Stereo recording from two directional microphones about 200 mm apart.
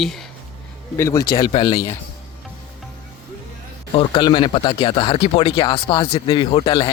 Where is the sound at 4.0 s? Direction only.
25° left (ahead or behind).